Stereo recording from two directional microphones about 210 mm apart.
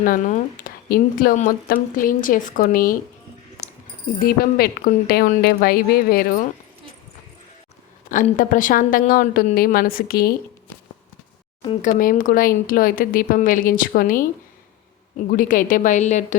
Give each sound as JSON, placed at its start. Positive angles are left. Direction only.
{"t": 0.0, "sound": "speech", "side_deg": 40}
{"t": 4.2, "sound": "a woman's voice", "side_deg": 45}
{"t": 8.1, "sound": "speech", "side_deg": 40}
{"t": 11.8, "sound": "speech", "side_deg": 40}
{"t": 15.3, "sound": "speech", "side_deg": 40}